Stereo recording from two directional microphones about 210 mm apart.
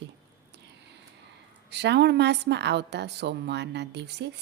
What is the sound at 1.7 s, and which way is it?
A woman's voice, 55° right (ahead or behind).